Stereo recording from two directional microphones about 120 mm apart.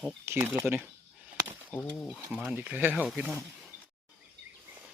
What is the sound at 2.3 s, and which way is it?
Speech, 10° right (ahead or behind).